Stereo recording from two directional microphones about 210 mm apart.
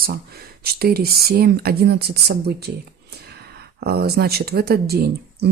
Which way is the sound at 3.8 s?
50° right (ahead or behind).